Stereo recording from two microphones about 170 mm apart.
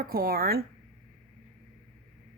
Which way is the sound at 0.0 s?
60° right (ahead or behind).